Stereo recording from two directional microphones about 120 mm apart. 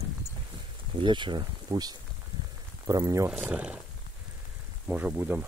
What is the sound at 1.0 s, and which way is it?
Speech, 40° right (ahead or behind).